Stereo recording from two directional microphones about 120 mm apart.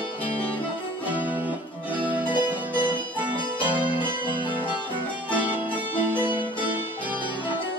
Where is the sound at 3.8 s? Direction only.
45° left (ahead or behind).